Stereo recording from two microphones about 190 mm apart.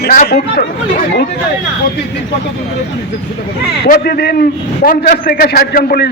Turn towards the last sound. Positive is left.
turn(degrees=50)  # may be behind; listen again after turning